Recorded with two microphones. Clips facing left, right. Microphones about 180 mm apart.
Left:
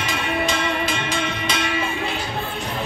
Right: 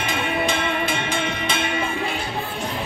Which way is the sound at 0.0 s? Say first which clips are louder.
Even; 55° right (ahead or behind).